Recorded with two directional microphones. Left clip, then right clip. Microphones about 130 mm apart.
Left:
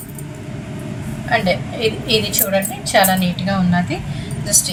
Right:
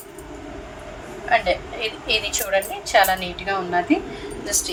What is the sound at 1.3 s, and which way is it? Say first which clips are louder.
A woman's voice: left 2 dB; 5° right (ahead or behind).